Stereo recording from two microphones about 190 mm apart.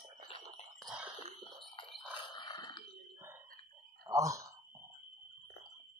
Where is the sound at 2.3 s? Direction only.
25° left (ahead or behind).